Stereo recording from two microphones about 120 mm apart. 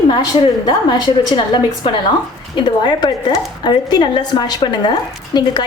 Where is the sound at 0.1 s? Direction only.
40° left (ahead or behind).